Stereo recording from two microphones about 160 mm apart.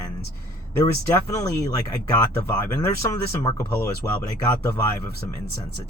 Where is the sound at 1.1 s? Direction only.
20° left (ahead or behind).